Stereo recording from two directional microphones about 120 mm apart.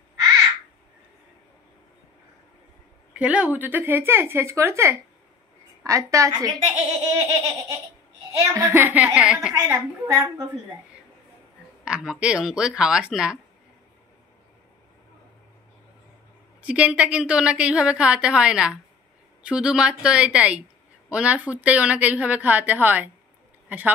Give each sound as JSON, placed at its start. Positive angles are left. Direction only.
{"t": 3.1, "sound": "a woman's voice", "side_deg": -10}
{"t": 8.8, "sound": "a woman's voice", "side_deg": -10}
{"t": 9.7, "sound": "a woman's voice", "side_deg": -25}
{"t": 11.8, "sound": "a woman's voice", "side_deg": -5}
{"t": 16.6, "sound": "a woman's voice", "side_deg": -10}